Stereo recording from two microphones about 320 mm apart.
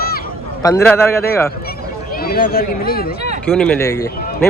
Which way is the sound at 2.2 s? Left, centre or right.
Left.